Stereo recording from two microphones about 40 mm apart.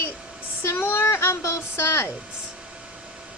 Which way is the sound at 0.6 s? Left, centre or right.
Left.